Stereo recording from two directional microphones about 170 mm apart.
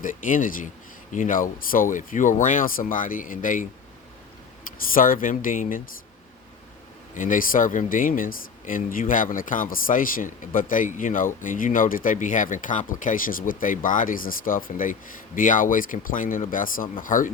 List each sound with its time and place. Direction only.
0.0 s speech: 50° left (ahead or behind)
4.9 s speech: 55° left (ahead or behind)
7.1 s speech: 50° left (ahead or behind)